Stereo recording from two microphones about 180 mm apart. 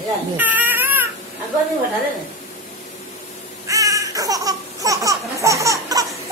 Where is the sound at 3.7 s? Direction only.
20° right (ahead or behind).